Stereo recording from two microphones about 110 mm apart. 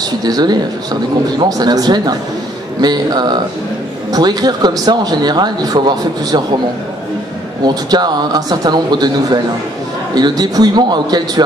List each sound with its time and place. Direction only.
0.2 s speech: 40° right (ahead or behind)
1.6 s speech: 40° right (ahead or behind)
7.6 s speech: 40° right (ahead or behind)